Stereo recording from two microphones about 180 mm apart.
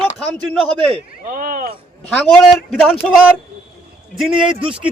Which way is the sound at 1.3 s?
50° right (ahead or behind).